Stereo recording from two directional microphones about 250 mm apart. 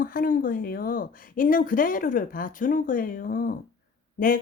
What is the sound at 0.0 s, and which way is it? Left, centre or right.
Speech, left.